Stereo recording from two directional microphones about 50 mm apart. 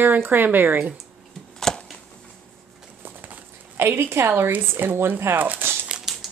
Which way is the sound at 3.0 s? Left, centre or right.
Right.